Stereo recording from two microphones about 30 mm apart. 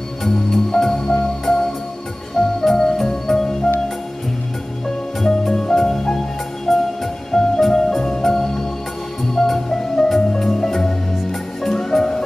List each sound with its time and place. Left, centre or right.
0.2 s music: centre
5.2 s music: centre